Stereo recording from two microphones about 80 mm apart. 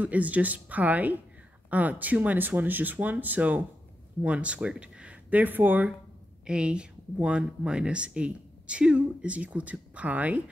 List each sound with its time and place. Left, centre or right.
0.0 s speech: centre
6.4 s speech: centre